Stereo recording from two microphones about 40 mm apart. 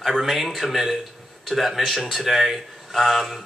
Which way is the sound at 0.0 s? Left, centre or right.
Centre.